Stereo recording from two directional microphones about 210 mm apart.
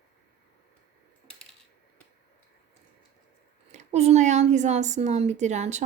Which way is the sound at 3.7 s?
30° right (ahead or behind).